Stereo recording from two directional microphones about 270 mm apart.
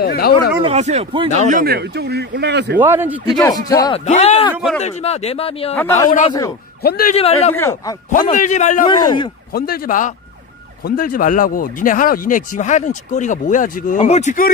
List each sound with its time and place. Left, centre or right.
0.0 s speech: left
0.7 s speech: right
1.5 s speech: right
2.8 s a man's voice: centre
3.3 s speech: centre
4.0 s speech: left
4.6 s speech: centre
4.8 s speech: left
5.8 s speech: centre
6.0 s a man's voice: left
7.2 s speech: left
7.5 s speech: centre
8.4 s speech: left
9.5 s a man's voice: left